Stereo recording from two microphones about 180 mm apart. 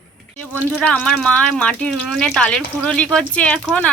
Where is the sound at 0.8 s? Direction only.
5° left (ahead or behind).